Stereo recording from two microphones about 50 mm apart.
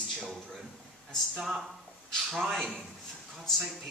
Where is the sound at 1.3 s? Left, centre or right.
Centre.